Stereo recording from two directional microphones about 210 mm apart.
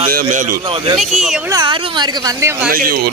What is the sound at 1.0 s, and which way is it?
Speech, centre (ahead or behind).